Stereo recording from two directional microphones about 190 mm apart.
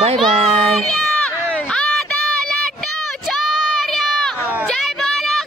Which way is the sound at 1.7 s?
5° left (ahead or behind).